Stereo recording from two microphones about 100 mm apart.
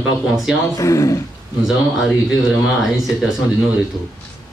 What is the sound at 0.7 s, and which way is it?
Speech, 30° left (ahead or behind).